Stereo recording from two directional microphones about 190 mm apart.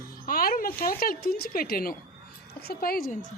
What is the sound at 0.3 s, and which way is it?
A woman's voice, 50° left (ahead or behind).